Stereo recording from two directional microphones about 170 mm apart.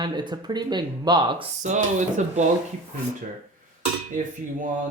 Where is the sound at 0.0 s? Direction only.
25° right (ahead or behind).